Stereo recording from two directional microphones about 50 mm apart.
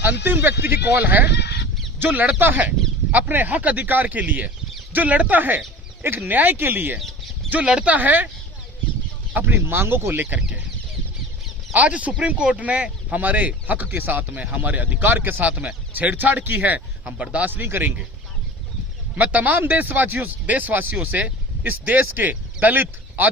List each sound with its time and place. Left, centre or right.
0.0 s speech: right
7.6 s speech: right
7.9 s speech: right
9.4 s speech: right
10.2 s speech: right
11.7 s speech: right
17.5 s speech: right
19.1 s speech: right